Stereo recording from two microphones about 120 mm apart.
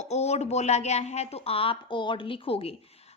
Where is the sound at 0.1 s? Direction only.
65° left (ahead or behind).